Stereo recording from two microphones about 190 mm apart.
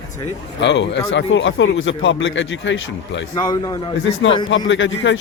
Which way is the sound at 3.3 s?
20° left (ahead or behind).